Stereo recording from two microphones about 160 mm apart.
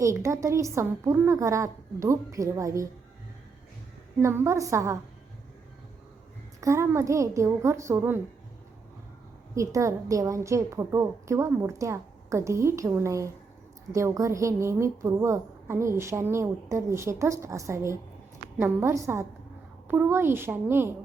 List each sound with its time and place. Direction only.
0.0 s a woman's voice: 20° right (ahead or behind)
4.2 s a woman's voice: 15° right (ahead or behind)
6.6 s a woman's voice: 15° right (ahead or behind)
9.6 s a woman's voice: 20° right (ahead or behind)